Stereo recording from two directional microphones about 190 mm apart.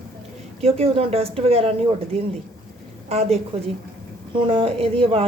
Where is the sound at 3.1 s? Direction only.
35° right (ahead or behind).